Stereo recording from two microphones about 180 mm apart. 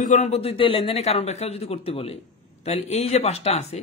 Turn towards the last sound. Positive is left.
turn(degrees=35)  # may be behind; listen again after turning